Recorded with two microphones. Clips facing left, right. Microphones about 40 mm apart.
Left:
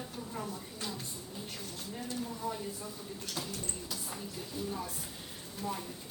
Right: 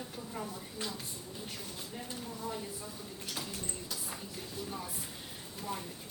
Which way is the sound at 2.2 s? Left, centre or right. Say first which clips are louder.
Left 1 dB; centre.